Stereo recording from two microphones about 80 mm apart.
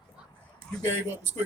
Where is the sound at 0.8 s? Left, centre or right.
Right.